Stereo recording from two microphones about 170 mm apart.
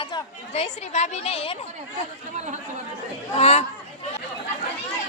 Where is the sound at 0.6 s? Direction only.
40° left (ahead or behind).